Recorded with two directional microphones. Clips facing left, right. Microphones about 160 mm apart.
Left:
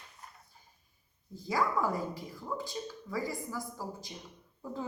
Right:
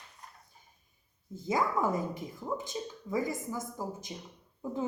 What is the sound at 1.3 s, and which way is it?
A woman's voice, 20° right (ahead or behind).